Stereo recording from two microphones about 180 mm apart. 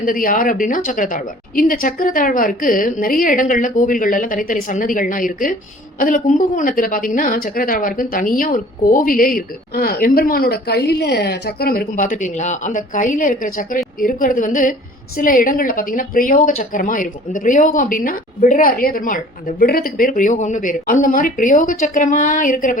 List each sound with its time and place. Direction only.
0.0 s speech: 50° left (ahead or behind)